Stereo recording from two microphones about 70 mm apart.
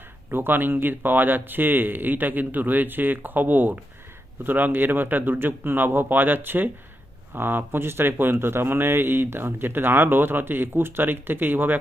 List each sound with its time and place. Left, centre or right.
0.3 s speech: right